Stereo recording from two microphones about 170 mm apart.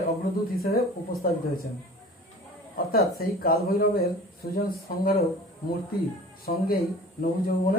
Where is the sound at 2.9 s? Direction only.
60° left (ahead or behind).